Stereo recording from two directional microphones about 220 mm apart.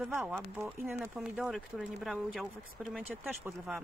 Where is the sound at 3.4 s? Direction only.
5° right (ahead or behind).